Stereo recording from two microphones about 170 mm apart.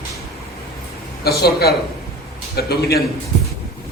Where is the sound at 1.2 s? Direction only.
70° left (ahead or behind).